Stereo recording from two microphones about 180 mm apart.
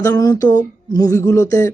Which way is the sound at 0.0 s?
20° left (ahead or behind).